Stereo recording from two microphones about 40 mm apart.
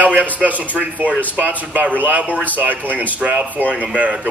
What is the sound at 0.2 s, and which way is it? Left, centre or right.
Speech, right.